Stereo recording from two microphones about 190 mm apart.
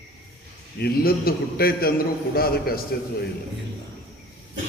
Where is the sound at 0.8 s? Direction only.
50° left (ahead or behind).